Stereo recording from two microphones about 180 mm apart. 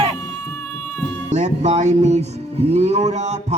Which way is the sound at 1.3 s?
40° right (ahead or behind).